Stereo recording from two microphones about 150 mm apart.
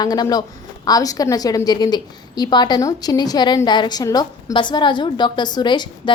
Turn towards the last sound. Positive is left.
turn(degrees=30)  # may be behind; listen again after turning